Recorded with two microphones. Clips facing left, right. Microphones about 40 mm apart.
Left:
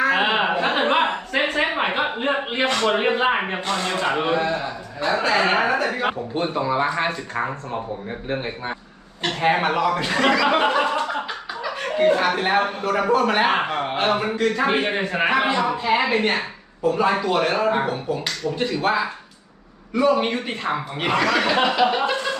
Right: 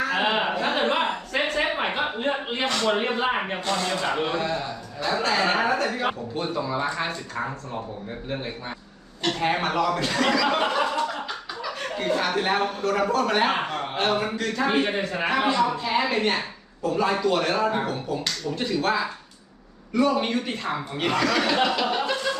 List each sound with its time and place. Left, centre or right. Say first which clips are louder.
0.0 s a sound: left 4 dB; left
4.9 s speech: left 4 dB; left
5.2 s a man's voice: left 3 dB; centre
6.3 s speech: left 5 dB; left
9.2 s a man's voice: left 4 dB; left